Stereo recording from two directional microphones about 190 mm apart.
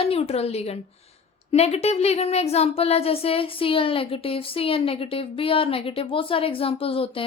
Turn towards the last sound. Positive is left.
turn(degrees=30)  # may be behind; listen again after turning